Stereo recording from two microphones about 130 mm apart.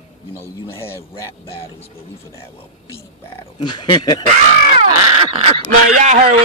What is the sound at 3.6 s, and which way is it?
Speech, 35° left (ahead or behind).